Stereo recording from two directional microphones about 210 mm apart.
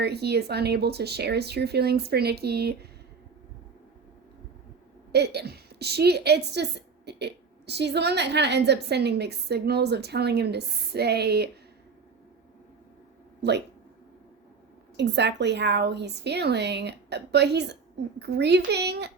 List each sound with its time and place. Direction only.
0.0 s a woman's voice: 50° right (ahead or behind)
5.1 s a woman's voice: 50° right (ahead or behind)
14.9 s a woman's voice: 55° right (ahead or behind)